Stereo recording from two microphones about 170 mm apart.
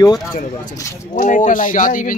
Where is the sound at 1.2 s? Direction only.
50° left (ahead or behind).